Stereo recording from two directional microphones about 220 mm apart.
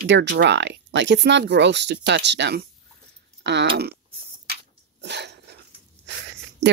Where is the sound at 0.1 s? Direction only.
55° right (ahead or behind).